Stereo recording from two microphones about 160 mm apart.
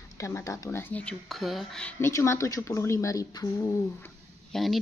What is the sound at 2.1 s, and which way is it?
Speech, 20° left (ahead or behind).